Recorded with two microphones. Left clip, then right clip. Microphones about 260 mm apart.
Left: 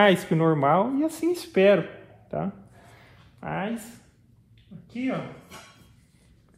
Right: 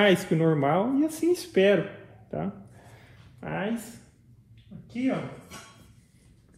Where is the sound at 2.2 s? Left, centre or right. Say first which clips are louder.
Left 3 dB; left.